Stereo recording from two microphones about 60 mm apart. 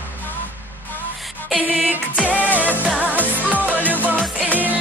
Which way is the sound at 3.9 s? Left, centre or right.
Right.